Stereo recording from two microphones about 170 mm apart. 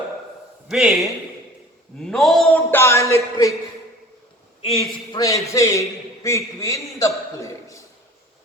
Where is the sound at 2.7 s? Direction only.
15° left (ahead or behind).